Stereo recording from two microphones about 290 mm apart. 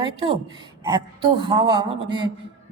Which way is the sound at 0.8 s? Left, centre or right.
Centre.